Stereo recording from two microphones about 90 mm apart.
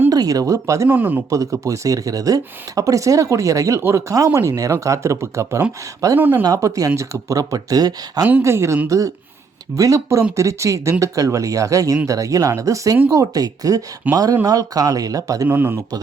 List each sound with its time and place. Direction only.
0.1 s speech: 45° right (ahead or behind)
0.9 s speech: 20° right (ahead or behind)
1.3 s speech: 35° right (ahead or behind)
6.1 s speech: 20° right (ahead or behind)
6.4 s speech: 40° right (ahead or behind)
8.4 s speech: 30° right (ahead or behind)
15.4 s speech: 20° right (ahead or behind)